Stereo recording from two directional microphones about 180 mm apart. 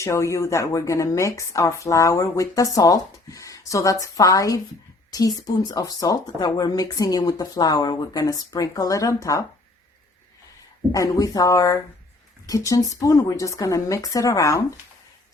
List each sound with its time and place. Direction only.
0.0 s speech: 15° left (ahead or behind)
10.9 s speech: 20° left (ahead or behind)